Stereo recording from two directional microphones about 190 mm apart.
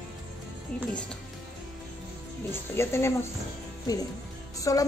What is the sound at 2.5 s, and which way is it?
Speech, 15° left (ahead or behind).